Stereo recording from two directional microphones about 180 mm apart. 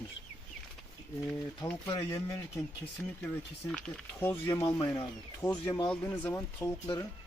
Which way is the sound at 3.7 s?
10° left (ahead or behind).